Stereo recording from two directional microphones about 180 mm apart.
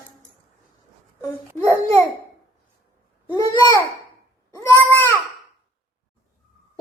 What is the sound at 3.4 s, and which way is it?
A woman's voice, 20° left (ahead or behind).